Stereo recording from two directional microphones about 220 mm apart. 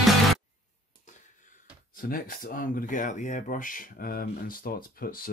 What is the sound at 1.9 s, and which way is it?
Speech, 40° left (ahead or behind).